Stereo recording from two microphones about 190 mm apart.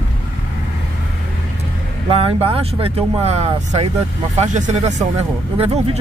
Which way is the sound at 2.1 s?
30° right (ahead or behind).